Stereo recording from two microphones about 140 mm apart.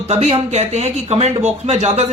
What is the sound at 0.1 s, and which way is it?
Speech, 45° right (ahead or behind).